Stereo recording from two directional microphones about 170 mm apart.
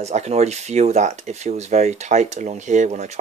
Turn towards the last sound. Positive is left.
turn(degrees=-40)  # may be behind; listen again after turning